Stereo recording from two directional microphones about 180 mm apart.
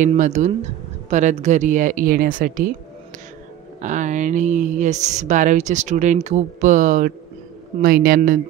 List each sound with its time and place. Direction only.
0.0 s speech: 40° right (ahead or behind)
3.8 s speech: 45° right (ahead or behind)